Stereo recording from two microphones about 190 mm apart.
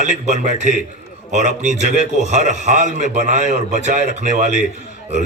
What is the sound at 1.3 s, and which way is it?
A man's voice, 40° right (ahead or behind).